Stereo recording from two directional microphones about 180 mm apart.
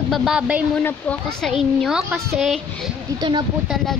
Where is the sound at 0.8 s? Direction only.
5° left (ahead or behind).